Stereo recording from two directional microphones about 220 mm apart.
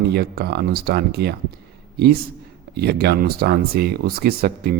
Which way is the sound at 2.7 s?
45° right (ahead or behind).